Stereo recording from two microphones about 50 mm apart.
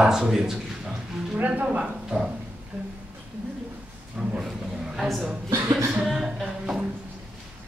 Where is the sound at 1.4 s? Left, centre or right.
Right.